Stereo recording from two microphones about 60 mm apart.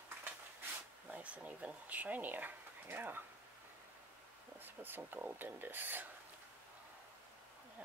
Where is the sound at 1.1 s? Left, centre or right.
Right.